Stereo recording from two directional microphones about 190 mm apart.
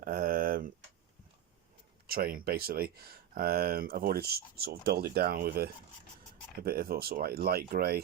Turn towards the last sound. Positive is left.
turn(degrees=-55)  # may be behind; listen again after turning